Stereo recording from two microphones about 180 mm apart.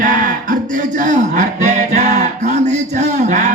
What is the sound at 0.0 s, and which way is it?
Music, 50° right (ahead or behind).